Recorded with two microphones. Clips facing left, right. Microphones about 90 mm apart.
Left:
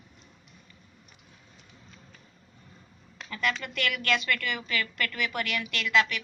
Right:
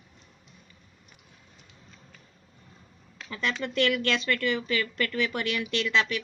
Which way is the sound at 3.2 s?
25° right (ahead or behind).